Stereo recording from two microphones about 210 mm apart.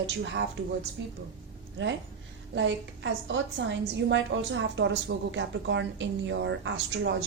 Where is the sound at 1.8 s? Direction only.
60° right (ahead or behind).